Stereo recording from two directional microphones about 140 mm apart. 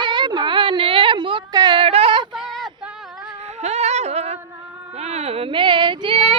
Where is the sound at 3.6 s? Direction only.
50° right (ahead or behind).